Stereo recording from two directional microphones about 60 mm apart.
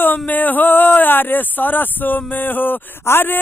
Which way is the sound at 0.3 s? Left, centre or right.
Left.